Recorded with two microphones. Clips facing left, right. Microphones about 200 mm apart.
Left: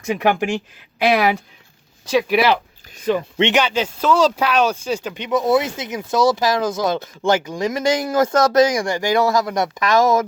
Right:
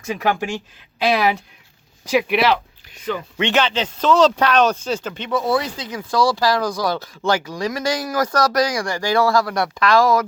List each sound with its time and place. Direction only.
0.0 s speech: 10° left (ahead or behind)
3.1 s speech: 25° left (ahead or behind)
3.5 s speech: 10° left (ahead or behind)